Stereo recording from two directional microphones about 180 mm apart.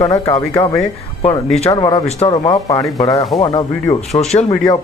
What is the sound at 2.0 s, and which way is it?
Speech, 35° left (ahead or behind).